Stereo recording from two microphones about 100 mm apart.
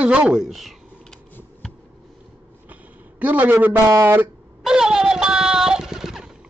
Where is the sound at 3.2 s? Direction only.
15° right (ahead or behind).